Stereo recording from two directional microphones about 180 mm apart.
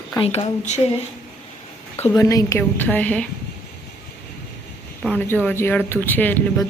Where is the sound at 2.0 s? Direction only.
15° left (ahead or behind).